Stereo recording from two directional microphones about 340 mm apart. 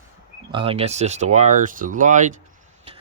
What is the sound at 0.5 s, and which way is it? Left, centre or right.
Speech, centre.